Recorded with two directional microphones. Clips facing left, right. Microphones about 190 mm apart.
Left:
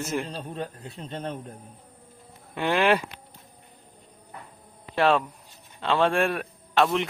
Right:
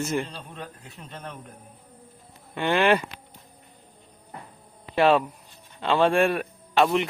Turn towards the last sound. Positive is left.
turn(degrees=0)  # may be behind; listen again after turning